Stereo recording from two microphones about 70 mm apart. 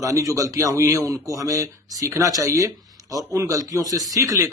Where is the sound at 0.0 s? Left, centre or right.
Right.